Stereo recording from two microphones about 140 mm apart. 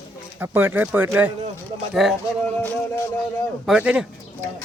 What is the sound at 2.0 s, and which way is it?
Speech, centre (ahead or behind).